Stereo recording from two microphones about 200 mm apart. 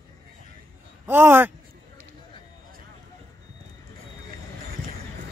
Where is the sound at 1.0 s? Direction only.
10° right (ahead or behind).